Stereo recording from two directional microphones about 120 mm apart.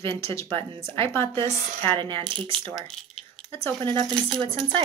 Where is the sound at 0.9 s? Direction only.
20° left (ahead or behind).